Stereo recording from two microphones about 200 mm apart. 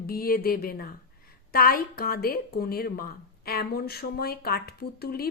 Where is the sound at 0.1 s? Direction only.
50° left (ahead or behind).